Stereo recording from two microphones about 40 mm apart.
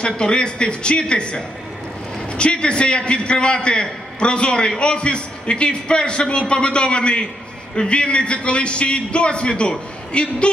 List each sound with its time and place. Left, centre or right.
0.0 s a man's voice: left